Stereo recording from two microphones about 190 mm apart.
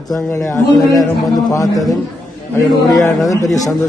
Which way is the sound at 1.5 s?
20° left (ahead or behind).